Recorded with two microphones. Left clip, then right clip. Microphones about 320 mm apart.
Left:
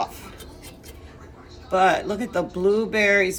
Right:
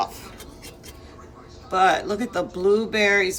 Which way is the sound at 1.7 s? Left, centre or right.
Centre.